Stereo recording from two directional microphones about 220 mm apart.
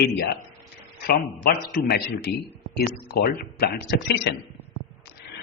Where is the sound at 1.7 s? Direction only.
45° left (ahead or behind).